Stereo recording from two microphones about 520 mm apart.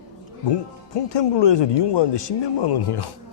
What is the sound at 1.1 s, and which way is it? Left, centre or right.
Speech, left.